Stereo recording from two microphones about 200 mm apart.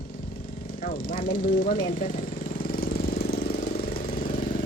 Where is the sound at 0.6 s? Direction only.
45° left (ahead or behind).